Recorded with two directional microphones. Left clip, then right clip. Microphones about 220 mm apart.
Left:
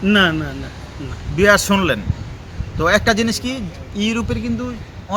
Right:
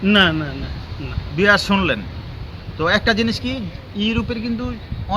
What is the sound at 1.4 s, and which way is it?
A man's voice, 15° left (ahead or behind).